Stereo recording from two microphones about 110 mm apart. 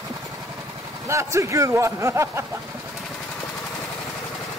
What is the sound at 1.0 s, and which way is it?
A man's voice, 25° right (ahead or behind).